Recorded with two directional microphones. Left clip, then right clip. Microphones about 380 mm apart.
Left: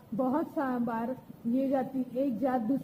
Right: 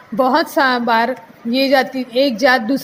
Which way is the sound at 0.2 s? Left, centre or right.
Right.